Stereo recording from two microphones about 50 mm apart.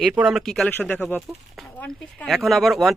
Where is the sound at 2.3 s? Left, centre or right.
Centre.